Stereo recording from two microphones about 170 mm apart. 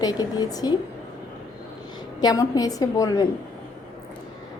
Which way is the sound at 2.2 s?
20° left (ahead or behind).